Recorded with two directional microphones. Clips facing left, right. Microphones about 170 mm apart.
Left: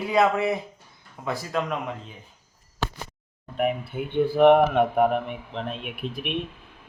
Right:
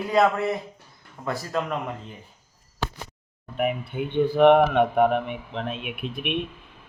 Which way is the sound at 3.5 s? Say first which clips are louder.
Even; 5° right (ahead or behind).